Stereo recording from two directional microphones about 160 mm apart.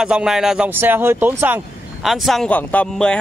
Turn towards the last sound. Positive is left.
turn(degrees=5)  # may be behind; listen again after turning